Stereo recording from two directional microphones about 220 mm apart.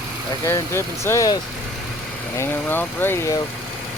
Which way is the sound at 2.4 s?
10° left (ahead or behind).